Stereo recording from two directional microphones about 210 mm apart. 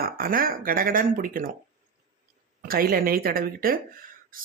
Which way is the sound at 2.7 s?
45° right (ahead or behind).